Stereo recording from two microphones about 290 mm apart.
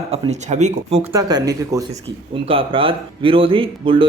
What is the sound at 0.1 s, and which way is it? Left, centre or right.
Speech, right.